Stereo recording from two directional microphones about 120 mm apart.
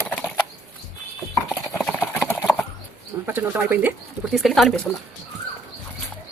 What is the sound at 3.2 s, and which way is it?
Speech, 15° right (ahead or behind).